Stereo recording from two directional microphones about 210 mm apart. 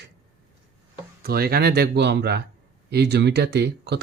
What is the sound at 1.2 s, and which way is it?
Speech, 45° right (ahead or behind).